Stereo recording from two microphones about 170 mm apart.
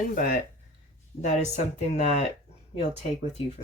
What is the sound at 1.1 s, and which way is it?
Speech, 40° left (ahead or behind).